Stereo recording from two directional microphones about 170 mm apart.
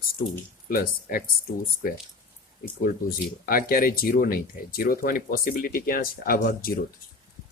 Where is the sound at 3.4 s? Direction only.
60° left (ahead or behind).